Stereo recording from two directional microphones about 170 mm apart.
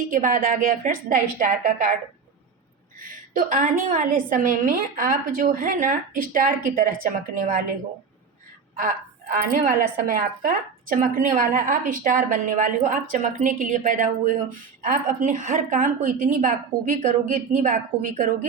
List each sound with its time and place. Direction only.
0.1 s a woman's voice: 50° right (ahead or behind)
3.0 s a woman's voice: 55° right (ahead or behind)
9.3 s a woman's voice: 55° right (ahead or behind)